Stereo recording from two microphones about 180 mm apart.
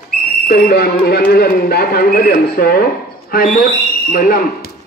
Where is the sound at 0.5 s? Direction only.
60° left (ahead or behind).